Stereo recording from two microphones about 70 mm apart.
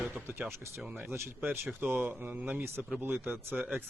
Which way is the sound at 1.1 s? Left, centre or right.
Right.